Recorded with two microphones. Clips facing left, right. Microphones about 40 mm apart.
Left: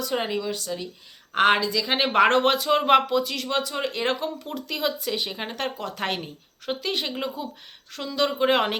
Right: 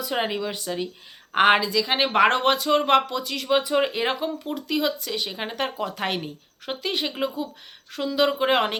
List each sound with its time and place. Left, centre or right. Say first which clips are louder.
0.0 s speech: right 1 dB; centre
3.5 s speech: right 7 dB; right; by 8.8 s centre